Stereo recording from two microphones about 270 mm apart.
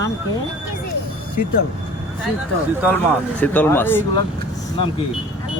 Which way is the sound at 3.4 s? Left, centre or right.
Centre.